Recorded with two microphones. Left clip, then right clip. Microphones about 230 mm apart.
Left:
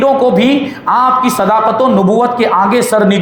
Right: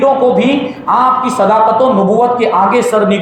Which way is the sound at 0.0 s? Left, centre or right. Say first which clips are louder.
Even; left.